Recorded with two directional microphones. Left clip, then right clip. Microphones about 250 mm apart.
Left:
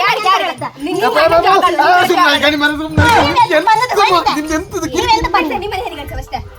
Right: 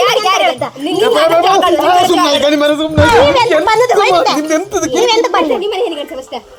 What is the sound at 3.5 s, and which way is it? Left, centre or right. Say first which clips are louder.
A woman's voice: right 2 dB; left.